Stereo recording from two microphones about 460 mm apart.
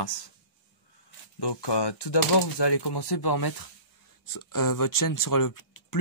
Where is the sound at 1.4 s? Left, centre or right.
Left.